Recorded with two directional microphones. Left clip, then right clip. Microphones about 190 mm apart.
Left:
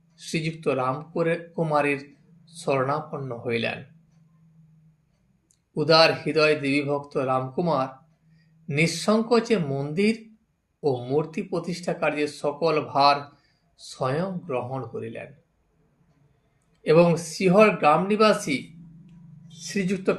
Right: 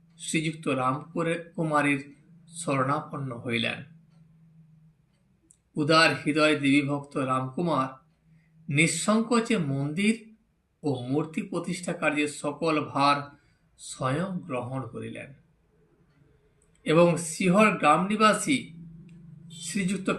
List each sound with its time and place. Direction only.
0.2 s speech: 40° left (ahead or behind)
5.7 s speech: 40° left (ahead or behind)
16.8 s speech: 40° left (ahead or behind)
19.6 s speech: 40° left (ahead or behind)